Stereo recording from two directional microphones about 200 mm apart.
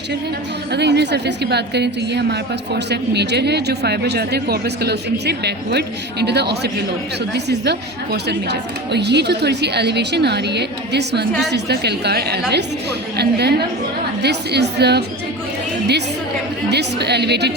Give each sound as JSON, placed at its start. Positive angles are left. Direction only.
{"t": 0.7, "sound": "a woman's voice", "side_deg": -55}
{"t": 16.6, "sound": "a woman's voice", "side_deg": -55}